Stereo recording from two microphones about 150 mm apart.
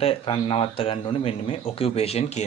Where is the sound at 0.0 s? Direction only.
35° left (ahead or behind).